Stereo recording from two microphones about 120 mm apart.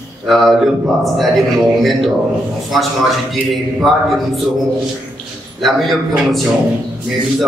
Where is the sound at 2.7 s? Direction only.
Centre (ahead or behind).